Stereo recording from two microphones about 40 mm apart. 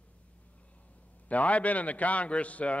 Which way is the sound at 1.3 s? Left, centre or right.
Left.